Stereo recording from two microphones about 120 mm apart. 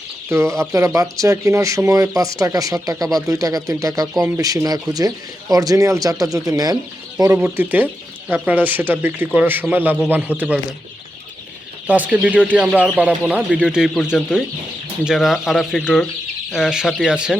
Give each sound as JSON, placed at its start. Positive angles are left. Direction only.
{"t": 0.3, "sound": "speech", "side_deg": -25}
{"t": 7.3, "sound": "speech", "side_deg": -15}
{"t": 11.9, "sound": "speech", "side_deg": -15}
{"t": 15.8, "sound": "speech", "side_deg": 10}
{"t": 16.5, "sound": "speech", "side_deg": -5}